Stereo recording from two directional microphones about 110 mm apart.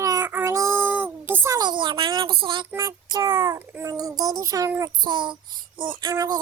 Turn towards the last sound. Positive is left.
turn(degrees=-35)  # may be behind; listen again after turning